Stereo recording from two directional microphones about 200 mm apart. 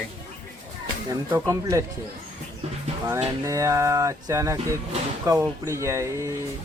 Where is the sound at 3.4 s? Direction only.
15° right (ahead or behind).